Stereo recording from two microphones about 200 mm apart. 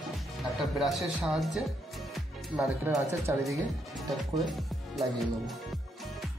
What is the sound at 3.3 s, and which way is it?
Speech, 15° right (ahead or behind).